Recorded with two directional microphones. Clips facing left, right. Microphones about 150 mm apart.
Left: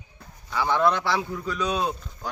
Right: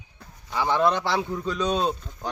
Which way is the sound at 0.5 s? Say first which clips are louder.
Even; 15° right (ahead or behind).